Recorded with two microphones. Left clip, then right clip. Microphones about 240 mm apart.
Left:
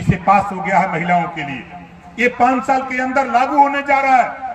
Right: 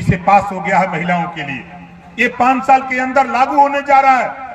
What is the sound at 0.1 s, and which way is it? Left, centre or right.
Speech, right.